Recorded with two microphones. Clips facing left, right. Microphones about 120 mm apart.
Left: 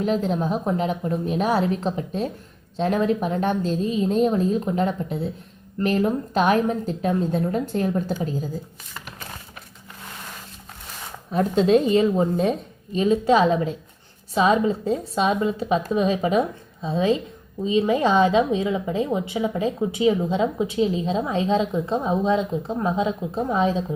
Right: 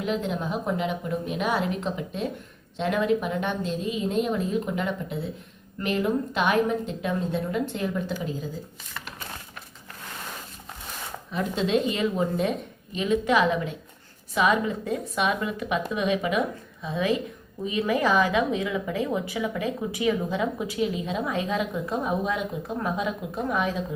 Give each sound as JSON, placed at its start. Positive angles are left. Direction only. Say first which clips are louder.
{"t": 0.0, "sound": "a woman's voice", "louder": "left 5 dB", "side_deg": 35}
{"t": 11.3, "sound": "a woman's voice", "louder": "left 7 dB", "side_deg": 40}